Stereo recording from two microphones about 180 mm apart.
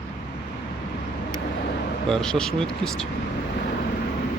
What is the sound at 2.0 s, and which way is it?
Speech, 5° left (ahead or behind).